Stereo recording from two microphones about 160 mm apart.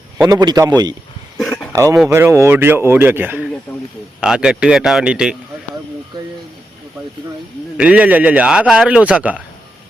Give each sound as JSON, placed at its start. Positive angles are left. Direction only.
{"t": 0.2, "sound": "a man's voice", "side_deg": -25}
{"t": 1.4, "sound": "a sound", "side_deg": 0}
{"t": 1.7, "sound": "a man's voice", "side_deg": -20}
{"t": 7.8, "sound": "a man's voice", "side_deg": -10}